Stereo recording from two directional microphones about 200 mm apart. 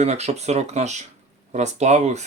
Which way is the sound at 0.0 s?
35° right (ahead or behind).